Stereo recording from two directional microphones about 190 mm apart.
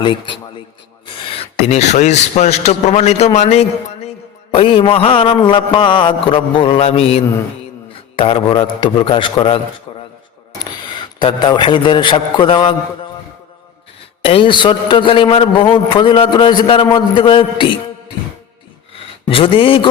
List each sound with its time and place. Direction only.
0.0 s a man's voice: 25° left (ahead or behind)
11.2 s a man's voice: 25° left (ahead or behind)
14.3 s a man's voice: 25° left (ahead or behind)
19.2 s a man's voice: 30° left (ahead or behind)